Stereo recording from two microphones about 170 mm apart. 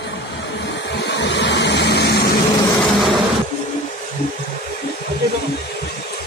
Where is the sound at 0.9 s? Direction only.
90° left; by 2.3 s 70° left (ahead or behind).